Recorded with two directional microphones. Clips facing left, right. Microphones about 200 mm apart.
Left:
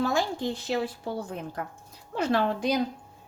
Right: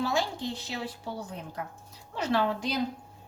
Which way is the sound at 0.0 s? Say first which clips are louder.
Left 3 dB; 50° left (ahead or behind).